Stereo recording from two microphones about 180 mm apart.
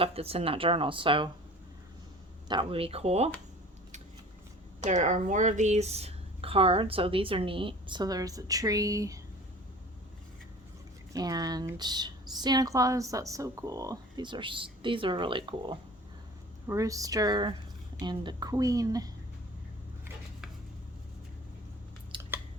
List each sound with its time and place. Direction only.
0.0 s a woman's voice: 35° right (ahead or behind)
2.5 s a woman's voice: 30° right (ahead or behind)
4.8 s a woman's voice: 40° right (ahead or behind); by 9.2 s 20° right (ahead or behind)
11.1 s a woman's voice: 20° right (ahead or behind)
22.1 s a sound: 30° right (ahead or behind)